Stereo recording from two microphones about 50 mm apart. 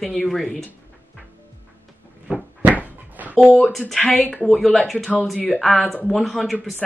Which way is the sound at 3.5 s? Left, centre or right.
Centre.